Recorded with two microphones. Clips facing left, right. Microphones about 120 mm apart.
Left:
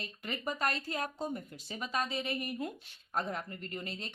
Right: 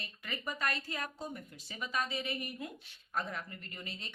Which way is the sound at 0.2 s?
30° left (ahead or behind).